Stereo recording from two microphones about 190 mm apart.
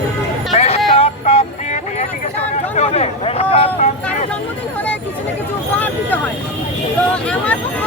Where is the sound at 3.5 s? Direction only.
35° left (ahead or behind).